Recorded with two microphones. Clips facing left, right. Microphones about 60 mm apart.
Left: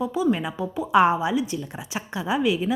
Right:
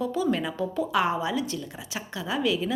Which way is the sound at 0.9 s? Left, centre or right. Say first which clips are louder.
Left 9 dB; left.